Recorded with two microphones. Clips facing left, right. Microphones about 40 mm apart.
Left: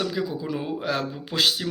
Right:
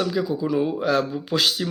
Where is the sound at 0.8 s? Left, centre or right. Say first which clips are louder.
Right 6 dB; left.